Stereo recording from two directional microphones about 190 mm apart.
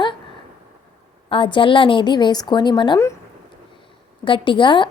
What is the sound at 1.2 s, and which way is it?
A woman's voice, 25° left (ahead or behind).